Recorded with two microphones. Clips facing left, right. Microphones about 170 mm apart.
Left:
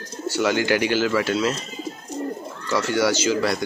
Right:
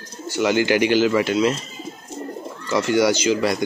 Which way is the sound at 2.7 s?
20° right (ahead or behind).